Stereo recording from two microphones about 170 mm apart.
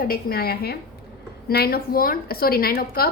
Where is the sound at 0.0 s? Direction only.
60° left (ahead or behind).